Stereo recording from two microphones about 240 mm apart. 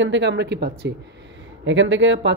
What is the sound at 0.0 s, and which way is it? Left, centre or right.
A woman's voice, right.